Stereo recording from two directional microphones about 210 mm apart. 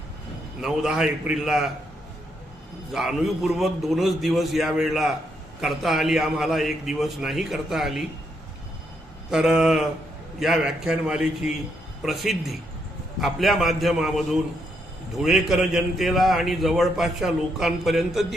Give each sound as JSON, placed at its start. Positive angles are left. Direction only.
{"t": 0.6, "sound": "a man's voice", "side_deg": -5}
{"t": 2.9, "sound": "a man's voice", "side_deg": 0}
{"t": 9.3, "sound": "a man's voice", "side_deg": -5}